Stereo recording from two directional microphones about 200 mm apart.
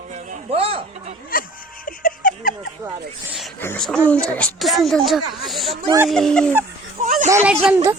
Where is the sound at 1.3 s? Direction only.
45° left (ahead or behind).